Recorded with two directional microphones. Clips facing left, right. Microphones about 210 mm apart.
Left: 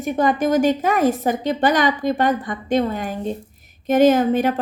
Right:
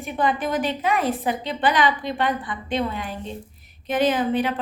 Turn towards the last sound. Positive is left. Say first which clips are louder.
# left 5 dB
turn(degrees=45)  # may be behind; listen again after turning